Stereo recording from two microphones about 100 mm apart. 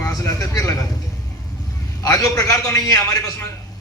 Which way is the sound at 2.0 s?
35° left (ahead or behind).